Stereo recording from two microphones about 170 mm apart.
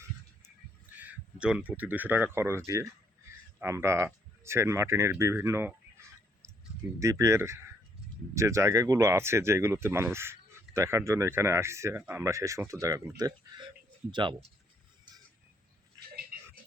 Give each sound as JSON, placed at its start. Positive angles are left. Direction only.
{"t": 0.9, "sound": "speech", "side_deg": -10}
{"t": 7.0, "sound": "speech", "side_deg": -20}